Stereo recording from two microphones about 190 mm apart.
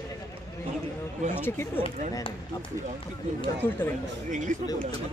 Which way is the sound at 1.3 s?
10° left (ahead or behind).